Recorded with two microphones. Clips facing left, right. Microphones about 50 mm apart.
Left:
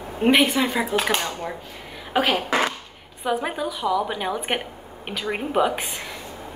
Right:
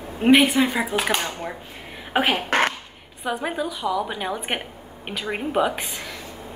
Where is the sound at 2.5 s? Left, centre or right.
Right.